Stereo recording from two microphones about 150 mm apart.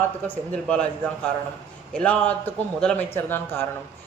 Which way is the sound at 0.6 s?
5° left (ahead or behind).